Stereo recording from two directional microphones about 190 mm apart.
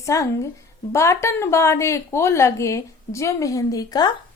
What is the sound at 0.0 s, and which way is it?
A woman's voice, 15° left (ahead or behind).